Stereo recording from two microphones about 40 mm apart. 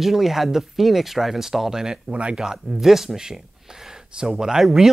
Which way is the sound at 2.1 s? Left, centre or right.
Right.